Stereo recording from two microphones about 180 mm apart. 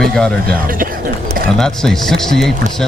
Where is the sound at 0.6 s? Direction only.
50° right (ahead or behind).